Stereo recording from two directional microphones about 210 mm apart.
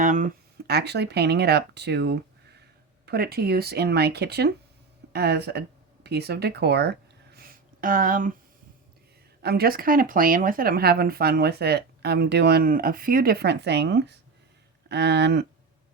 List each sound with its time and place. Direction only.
0.0 s speech: 35° right (ahead or behind)
0.7 s speech: 50° right (ahead or behind)
7.3 s a sound: 45° right (ahead or behind)
9.4 s speech: 50° right (ahead or behind)